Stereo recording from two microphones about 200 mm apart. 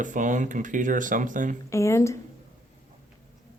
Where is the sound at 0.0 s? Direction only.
40° right (ahead or behind).